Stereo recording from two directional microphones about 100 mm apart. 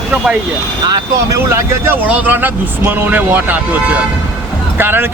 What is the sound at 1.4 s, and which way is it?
Speech, 25° right (ahead or behind).